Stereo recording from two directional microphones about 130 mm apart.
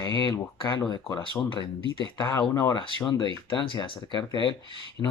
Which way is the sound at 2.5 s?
35° left (ahead or behind).